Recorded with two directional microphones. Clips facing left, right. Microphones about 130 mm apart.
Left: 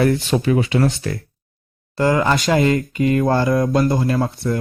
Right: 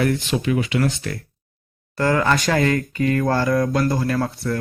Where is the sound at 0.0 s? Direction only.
30° left (ahead or behind).